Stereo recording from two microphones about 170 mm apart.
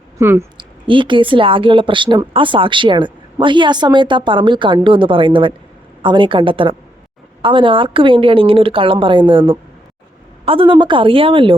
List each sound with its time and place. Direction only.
0.2 s a woman's voice: 15° right (ahead or behind)
0.5 s speech: 30° right (ahead or behind)